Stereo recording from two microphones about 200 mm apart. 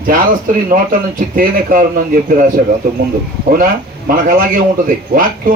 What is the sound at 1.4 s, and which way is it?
Speech, 45° right (ahead or behind).